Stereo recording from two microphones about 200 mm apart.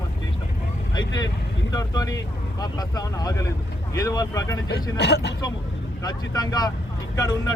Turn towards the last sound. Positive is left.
turn(degrees=15)  # may be behind; listen again after turning